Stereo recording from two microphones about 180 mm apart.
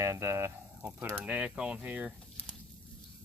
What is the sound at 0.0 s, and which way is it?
Speech, 15° right (ahead or behind).